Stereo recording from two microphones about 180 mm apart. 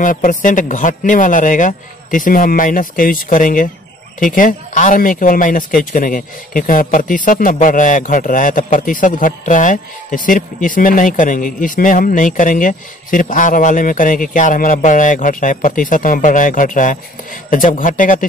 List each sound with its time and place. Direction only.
0.0 s a man's voice: 45° left (ahead or behind)